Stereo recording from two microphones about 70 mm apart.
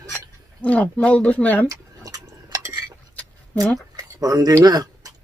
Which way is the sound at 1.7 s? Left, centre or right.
Right.